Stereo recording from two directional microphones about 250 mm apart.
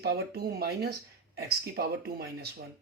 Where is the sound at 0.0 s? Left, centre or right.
Right.